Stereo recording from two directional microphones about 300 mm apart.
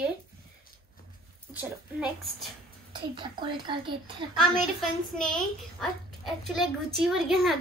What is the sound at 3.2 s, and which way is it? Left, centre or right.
Speech, centre.